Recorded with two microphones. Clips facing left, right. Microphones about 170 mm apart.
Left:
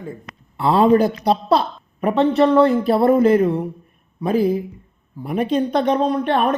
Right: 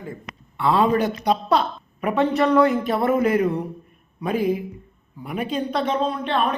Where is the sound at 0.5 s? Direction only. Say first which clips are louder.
Left 5 dB; 35° left (ahead or behind).